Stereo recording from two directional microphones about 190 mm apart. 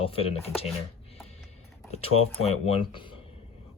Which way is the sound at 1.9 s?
30° left (ahead or behind).